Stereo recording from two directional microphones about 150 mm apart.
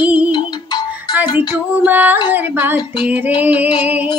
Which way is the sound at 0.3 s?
30° left (ahead or behind).